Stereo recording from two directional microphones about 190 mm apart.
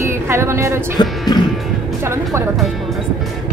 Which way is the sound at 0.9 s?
20° left (ahead or behind).